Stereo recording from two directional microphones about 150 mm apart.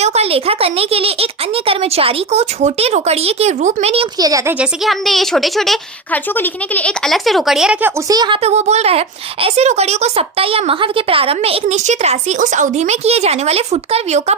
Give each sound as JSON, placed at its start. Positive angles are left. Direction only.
{"t": 0.0, "sound": "speech", "side_deg": -45}
{"t": 4.2, "sound": "speech", "side_deg": -20}
{"t": 4.6, "sound": "speech", "side_deg": 0}
{"t": 8.1, "sound": "speech", "side_deg": -30}
{"t": 8.4, "sound": "speech", "side_deg": -45}